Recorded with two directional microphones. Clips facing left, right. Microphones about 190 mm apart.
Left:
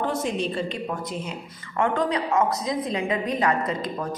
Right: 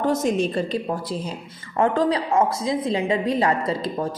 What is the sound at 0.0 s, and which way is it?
Speech, 45° right (ahead or behind).